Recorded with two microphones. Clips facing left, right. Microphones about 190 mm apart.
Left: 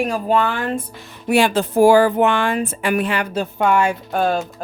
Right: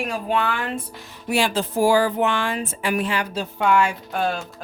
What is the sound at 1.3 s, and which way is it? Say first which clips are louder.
Speech: left 6 dB; 55° left (ahead or behind).